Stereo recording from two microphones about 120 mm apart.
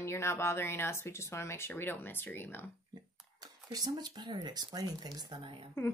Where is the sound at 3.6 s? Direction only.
35° right (ahead or behind).